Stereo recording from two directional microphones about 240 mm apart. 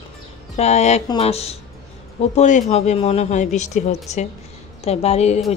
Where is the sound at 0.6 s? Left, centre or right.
Left.